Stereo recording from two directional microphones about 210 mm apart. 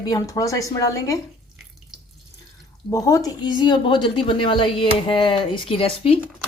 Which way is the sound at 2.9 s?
15° left (ahead or behind).